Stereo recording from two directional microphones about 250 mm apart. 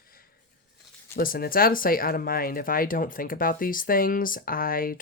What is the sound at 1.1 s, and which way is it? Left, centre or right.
Speech, left.